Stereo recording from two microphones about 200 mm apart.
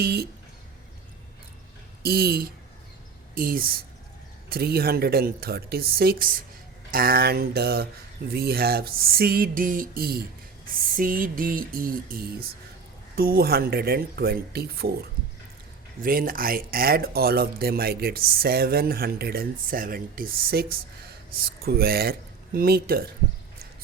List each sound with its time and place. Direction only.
0.0 s speech: 50° right (ahead or behind)
2.0 s speech: 50° right (ahead or behind)
16.0 s speech: 45° right (ahead or behind)